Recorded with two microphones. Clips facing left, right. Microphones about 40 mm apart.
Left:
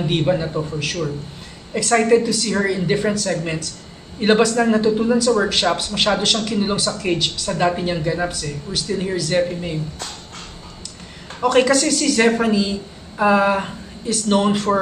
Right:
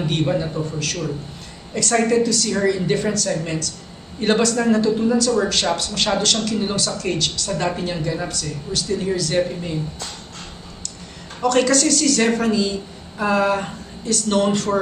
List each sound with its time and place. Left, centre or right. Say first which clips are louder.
0.1 s speech: left 3 dB; centre
11.4 s speech: left 2 dB; centre